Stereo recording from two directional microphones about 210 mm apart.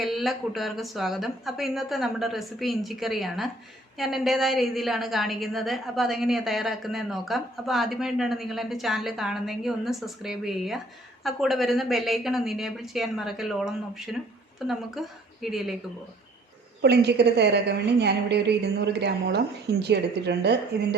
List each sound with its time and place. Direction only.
0.0 s a woman's voice: centre (ahead or behind)
16.8 s a woman's voice: 50° right (ahead or behind)